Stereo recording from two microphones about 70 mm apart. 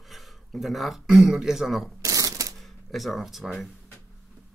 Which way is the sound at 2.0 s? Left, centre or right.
Right.